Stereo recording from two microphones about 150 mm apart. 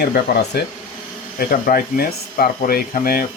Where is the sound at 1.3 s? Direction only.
75° left (ahead or behind).